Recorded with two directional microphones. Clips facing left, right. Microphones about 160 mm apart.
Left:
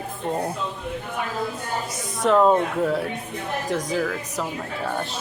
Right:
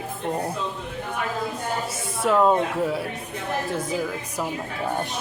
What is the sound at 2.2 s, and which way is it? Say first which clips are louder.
Speech: left 2 dB; centre (ahead or behind).